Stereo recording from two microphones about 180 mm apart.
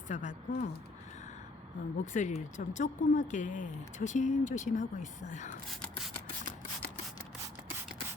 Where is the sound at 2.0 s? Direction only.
45° left (ahead or behind).